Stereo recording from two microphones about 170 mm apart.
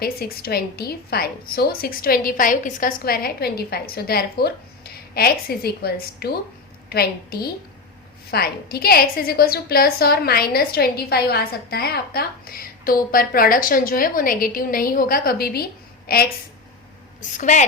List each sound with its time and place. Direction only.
0.0 s a woman's voice: 65° left (ahead or behind)
17.2 s a woman's voice: 45° left (ahead or behind)